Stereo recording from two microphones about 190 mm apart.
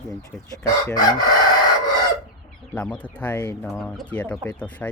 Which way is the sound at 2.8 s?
5° left (ahead or behind).